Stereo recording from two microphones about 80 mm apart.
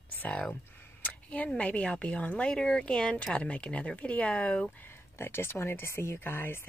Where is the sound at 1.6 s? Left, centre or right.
Centre.